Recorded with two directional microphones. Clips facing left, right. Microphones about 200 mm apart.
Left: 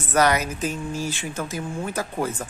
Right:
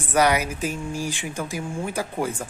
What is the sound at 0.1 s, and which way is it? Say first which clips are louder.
Speech: even; 10° right (ahead or behind).